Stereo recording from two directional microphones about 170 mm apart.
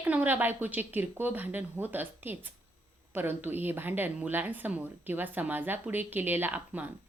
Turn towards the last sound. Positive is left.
turn(degrees=-10)  # may be behind; listen again after turning